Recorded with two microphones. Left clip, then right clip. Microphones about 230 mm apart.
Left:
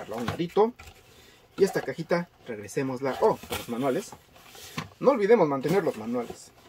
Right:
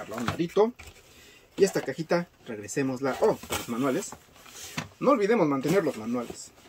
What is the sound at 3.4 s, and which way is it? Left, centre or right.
Speech, right.